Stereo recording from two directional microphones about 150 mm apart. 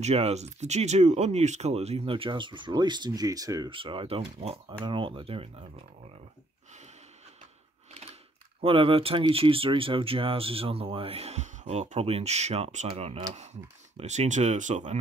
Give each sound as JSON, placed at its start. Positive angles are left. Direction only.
{"t": 0.0, "sound": "speech", "side_deg": -45}
{"t": 8.5, "sound": "speech", "side_deg": -35}